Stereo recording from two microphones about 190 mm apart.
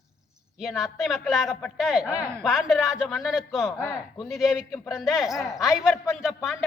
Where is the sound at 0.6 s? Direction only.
Centre (ahead or behind).